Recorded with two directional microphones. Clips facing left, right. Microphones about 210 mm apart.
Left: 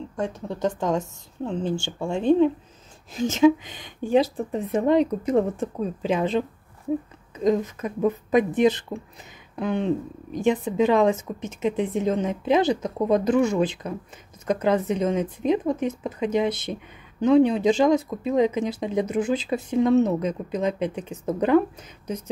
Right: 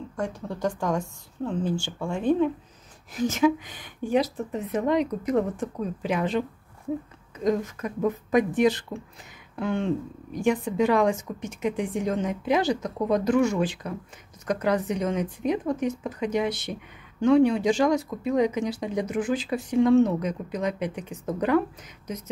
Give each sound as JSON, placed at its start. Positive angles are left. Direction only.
{"t": 0.1, "sound": "speech", "side_deg": 20}